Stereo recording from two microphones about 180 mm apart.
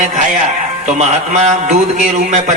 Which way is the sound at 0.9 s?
40° right (ahead or behind).